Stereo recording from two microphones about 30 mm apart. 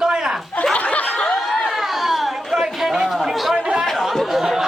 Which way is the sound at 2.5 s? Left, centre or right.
Centre.